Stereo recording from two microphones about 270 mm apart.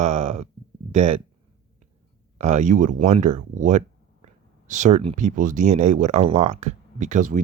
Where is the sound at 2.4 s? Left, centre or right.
Right.